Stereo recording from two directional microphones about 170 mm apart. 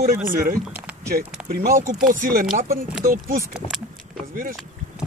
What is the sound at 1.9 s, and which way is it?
Speech, 50° right (ahead or behind).